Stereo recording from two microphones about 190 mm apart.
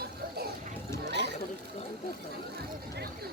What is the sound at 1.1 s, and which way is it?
Chatter, 65° right (ahead or behind).